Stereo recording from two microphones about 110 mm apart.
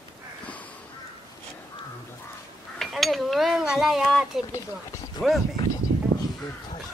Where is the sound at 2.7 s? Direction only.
Centre (ahead or behind).